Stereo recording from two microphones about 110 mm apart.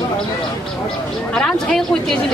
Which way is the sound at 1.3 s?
5° left (ahead or behind).